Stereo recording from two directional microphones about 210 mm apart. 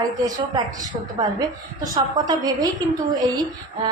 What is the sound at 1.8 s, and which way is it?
A woman's voice, 20° right (ahead or behind).